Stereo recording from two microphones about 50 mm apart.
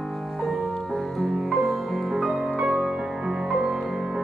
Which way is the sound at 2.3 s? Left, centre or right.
Right.